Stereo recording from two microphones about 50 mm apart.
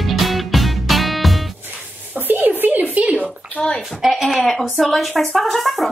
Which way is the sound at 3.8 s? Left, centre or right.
Centre.